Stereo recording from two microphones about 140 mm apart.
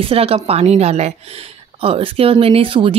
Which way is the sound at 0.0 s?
40° right (ahead or behind).